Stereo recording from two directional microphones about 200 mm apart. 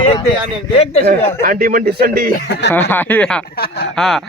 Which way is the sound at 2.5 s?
60° left (ahead or behind).